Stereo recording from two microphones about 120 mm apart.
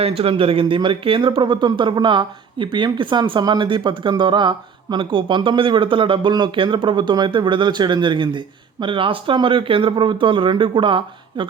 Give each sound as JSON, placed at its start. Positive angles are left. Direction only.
{"t": 0.0, "sound": "speech", "side_deg": -55}